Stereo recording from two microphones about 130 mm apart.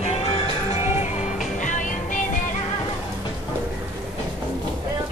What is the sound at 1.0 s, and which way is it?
Music, 70° left (ahead or behind).